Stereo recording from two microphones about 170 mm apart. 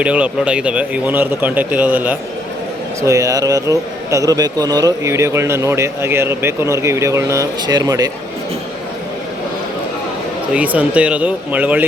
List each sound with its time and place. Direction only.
0.0 s a man's voice: 5° right (ahead or behind)
3.1 s a man's voice: 20° right (ahead or behind)
10.5 s a man's voice: 10° right (ahead or behind)